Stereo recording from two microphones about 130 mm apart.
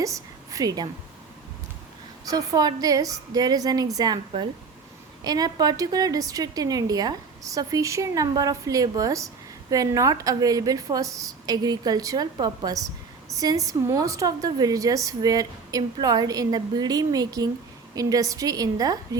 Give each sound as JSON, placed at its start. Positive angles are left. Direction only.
{"t": 0.0, "sound": "a woman's voice", "side_deg": -25}
{"t": 2.2, "sound": "a woman's voice", "side_deg": -30}